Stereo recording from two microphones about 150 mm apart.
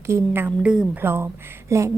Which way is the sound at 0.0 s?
15° right (ahead or behind).